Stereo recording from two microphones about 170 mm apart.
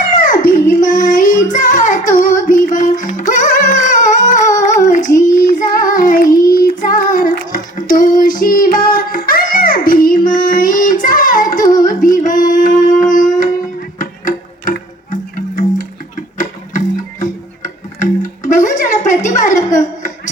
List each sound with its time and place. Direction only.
0.2 s a sound: 55° left (ahead or behind)
0.8 s child singing: 50° left (ahead or behind)
2.7 s music: 50° left (ahead or behind)
4.6 s child singing: 50° left (ahead or behind)
11.7 s music: 50° left (ahead or behind)